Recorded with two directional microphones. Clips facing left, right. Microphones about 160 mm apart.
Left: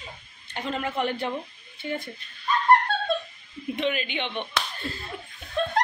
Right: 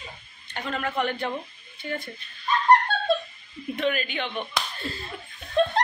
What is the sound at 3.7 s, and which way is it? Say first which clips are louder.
Speech: right 1 dB; 20° left (ahead or behind).